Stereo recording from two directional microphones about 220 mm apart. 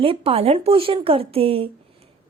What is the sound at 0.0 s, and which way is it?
A woman's voice, 25° right (ahead or behind).